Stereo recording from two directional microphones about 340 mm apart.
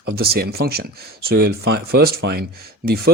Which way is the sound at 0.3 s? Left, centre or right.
Right.